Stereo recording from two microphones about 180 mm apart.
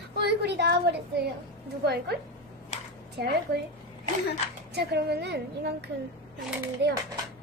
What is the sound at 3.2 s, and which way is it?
Speech, 65° right (ahead or behind).